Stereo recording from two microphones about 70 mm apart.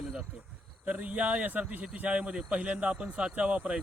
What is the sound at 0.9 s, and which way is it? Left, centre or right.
Speech, right.